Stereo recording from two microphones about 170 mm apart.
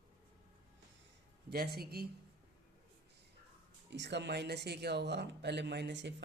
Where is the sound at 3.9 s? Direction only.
90° right.